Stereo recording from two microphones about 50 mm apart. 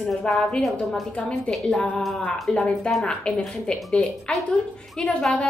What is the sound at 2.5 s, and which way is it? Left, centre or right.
Speech, centre.